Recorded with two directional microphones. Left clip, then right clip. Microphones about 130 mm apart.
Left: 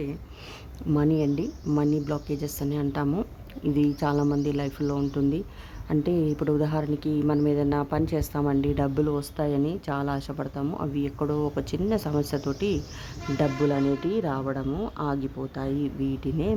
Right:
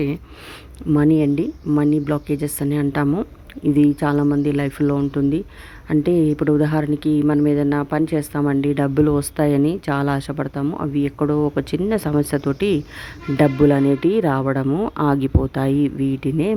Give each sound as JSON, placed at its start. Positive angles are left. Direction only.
{"t": 0.9, "sound": "speech", "side_deg": -35}
{"t": 9.0, "sound": "speech", "side_deg": -45}